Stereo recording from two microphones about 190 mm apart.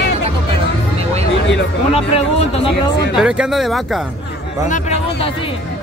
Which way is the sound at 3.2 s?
5° right (ahead or behind).